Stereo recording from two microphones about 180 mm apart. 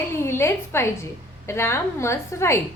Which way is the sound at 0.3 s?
15° left (ahead or behind).